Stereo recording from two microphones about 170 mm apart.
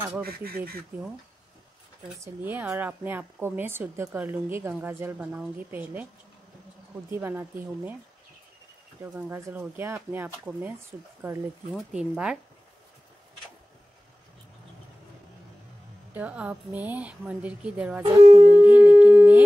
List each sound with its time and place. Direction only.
0.2 s speech: 65° right (ahead or behind)
2.1 s speech: 15° right (ahead or behind)
7.1 s speech: 15° right (ahead or behind)
9.0 s speech: 10° right (ahead or behind)
16.1 s speech: 10° right (ahead or behind)
18.2 s shofar: 40° right (ahead or behind)
18.5 s speech: 10° right (ahead or behind)